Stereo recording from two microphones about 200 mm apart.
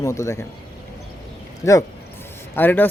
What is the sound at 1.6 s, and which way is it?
Speech, 15° left (ahead or behind).